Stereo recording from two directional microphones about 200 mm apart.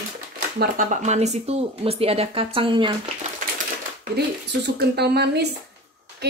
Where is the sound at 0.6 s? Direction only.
40° right (ahead or behind).